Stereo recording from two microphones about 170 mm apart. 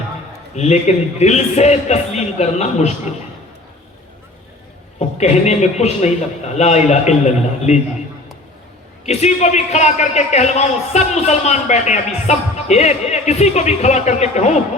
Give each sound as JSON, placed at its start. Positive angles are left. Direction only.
{"t": 0.5, "sound": "a man's voice", "side_deg": 40}
{"t": 4.9, "sound": "a man's voice", "side_deg": 40}
{"t": 9.0, "sound": "a man's voice", "side_deg": 40}